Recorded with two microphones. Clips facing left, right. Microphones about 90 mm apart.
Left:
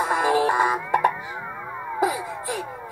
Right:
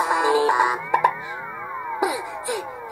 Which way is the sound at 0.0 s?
5° right (ahead or behind).